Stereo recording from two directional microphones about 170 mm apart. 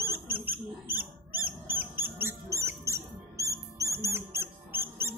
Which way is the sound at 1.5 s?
10° right (ahead or behind).